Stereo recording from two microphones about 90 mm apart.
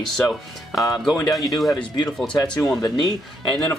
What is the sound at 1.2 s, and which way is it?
Speech, 40° left (ahead or behind).